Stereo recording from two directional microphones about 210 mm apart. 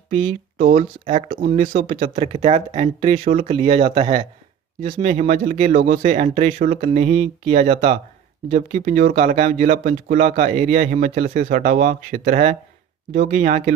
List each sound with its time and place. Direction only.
0.1 s speech: 25° right (ahead or behind)
0.6 s speech: 35° right (ahead or behind)
5.1 s speech: 35° right (ahead or behind)